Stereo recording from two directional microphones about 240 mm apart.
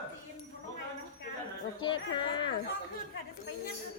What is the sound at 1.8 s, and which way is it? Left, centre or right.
Speech, centre.